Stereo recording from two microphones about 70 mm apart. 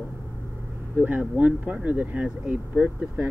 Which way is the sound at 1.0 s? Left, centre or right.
Right.